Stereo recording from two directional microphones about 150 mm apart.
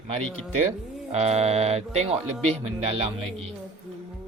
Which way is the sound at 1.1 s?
45° right (ahead or behind).